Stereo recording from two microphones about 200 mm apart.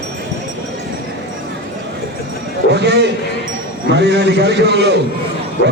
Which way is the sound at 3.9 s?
60° right (ahead or behind).